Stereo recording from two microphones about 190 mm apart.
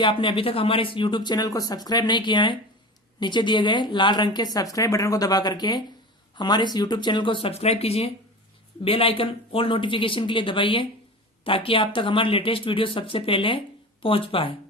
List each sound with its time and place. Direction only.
0.0 s speech: 25° left (ahead or behind)